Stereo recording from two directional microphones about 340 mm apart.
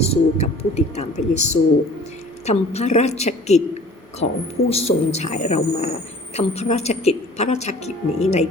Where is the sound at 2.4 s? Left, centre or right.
Centre.